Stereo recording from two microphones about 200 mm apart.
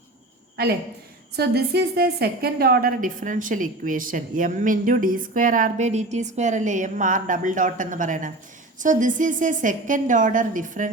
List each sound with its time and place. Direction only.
0.5 s a man's voice: 50° right (ahead or behind)